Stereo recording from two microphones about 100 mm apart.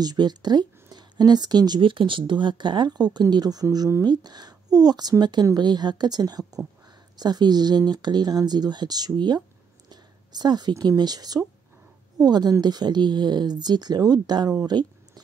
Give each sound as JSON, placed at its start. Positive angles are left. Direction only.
{"t": 0.0, "sound": "speech", "side_deg": -45}
{"t": 1.8, "sound": "speech", "side_deg": -60}